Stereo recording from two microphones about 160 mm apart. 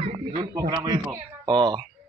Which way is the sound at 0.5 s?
25° right (ahead or behind).